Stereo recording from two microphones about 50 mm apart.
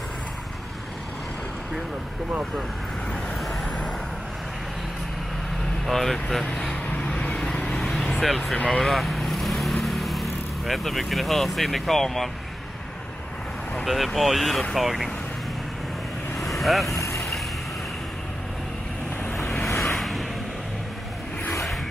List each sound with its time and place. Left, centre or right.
3.6 s vehicle: left
5.9 s speech: centre
6.5 s vehicle: centre
13.8 s speech: centre
16.6 s speech: centre
17.0 s vehicle: left
19.7 s vehicle: left
20.0 s vehicle: centre